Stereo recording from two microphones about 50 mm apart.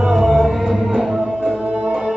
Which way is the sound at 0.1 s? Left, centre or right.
Centre.